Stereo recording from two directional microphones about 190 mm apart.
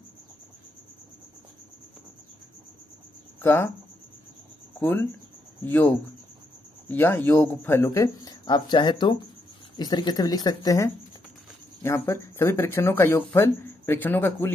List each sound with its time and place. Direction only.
3.3 s speech: 10° left (ahead or behind)
4.7 s speech: 10° left (ahead or behind)